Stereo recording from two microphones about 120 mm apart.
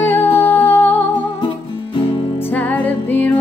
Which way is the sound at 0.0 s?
20° left (ahead or behind).